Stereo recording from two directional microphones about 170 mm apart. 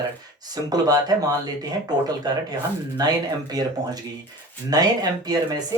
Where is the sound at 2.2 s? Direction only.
25° right (ahead or behind).